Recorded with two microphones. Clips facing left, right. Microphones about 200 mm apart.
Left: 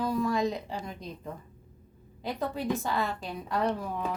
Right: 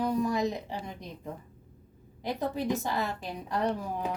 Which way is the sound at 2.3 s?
20° right (ahead or behind).